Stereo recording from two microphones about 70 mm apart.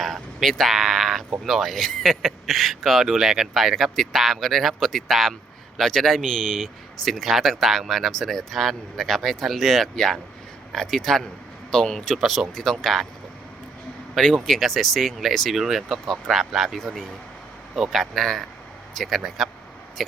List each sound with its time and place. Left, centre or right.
0.0 s a sound: centre
1.5 s speech: centre
14.4 s speech: centre